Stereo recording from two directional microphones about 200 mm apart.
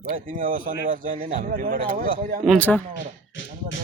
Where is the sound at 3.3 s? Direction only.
65° left (ahead or behind).